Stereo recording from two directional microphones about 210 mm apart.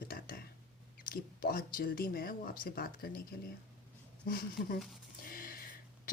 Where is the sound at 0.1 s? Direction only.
45° left (ahead or behind).